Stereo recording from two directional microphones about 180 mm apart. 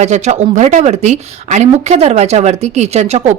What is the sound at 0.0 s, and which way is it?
Speech, 40° right (ahead or behind).